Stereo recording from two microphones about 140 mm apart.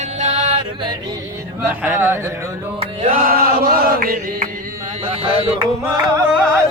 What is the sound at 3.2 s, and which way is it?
Chant, 90° right.